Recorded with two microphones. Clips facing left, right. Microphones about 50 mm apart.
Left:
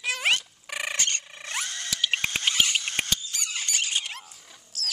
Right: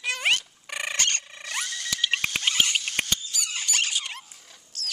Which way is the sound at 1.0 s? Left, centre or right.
Right.